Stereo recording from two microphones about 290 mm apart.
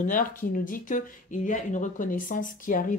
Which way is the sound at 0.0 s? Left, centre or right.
Left.